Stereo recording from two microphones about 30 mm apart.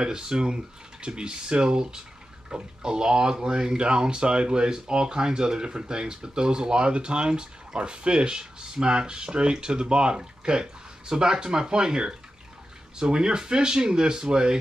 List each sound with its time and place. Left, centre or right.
0.0 s speech: right